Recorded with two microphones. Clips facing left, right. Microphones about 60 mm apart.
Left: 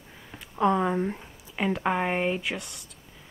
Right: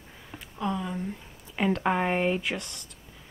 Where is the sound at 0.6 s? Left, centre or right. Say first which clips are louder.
Left 8 dB; left.